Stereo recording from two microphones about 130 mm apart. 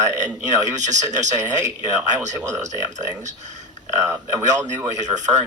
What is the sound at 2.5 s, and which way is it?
Speech, 65° right (ahead or behind).